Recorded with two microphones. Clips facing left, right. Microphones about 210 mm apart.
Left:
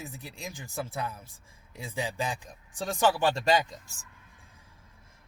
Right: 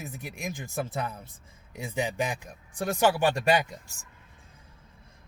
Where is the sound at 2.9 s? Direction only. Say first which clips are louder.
Right 1 dB; 10° right (ahead or behind).